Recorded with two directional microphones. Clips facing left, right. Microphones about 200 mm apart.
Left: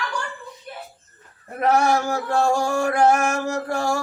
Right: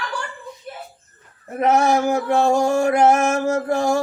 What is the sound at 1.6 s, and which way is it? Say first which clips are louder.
Male singing: right 2 dB; 20° right (ahead or behind).